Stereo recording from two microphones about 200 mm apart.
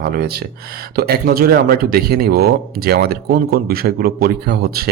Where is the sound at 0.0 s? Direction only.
50° right (ahead or behind).